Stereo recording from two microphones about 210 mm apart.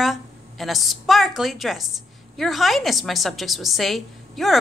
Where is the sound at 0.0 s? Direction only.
Centre (ahead or behind).